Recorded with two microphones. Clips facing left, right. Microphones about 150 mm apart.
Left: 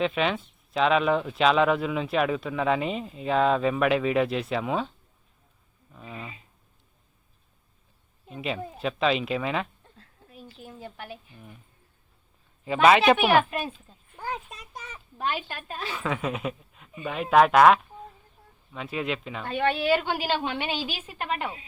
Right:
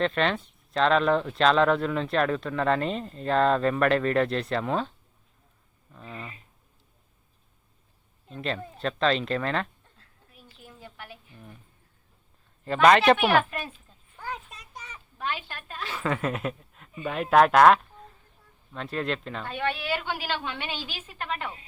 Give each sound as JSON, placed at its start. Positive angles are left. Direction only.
{"t": 0.0, "sound": "speech", "side_deg": 5}
{"t": 5.9, "sound": "a woman's voice", "side_deg": 5}
{"t": 8.3, "sound": "a woman's voice", "side_deg": 5}
{"t": 10.0, "sound": "a sound", "side_deg": 30}
{"t": 12.6, "sound": "a woman's voice", "side_deg": 5}
{"t": 15.4, "sound": "a woman's voice", "side_deg": 15}
{"t": 15.9, "sound": "speech", "side_deg": 0}
{"t": 19.5, "sound": "a woman's voice", "side_deg": 30}